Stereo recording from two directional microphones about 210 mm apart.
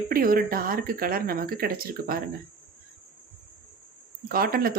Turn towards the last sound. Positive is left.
turn(degrees=-45)  # may be behind; listen again after turning